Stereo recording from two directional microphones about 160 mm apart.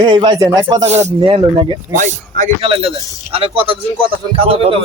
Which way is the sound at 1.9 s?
50° right (ahead or behind).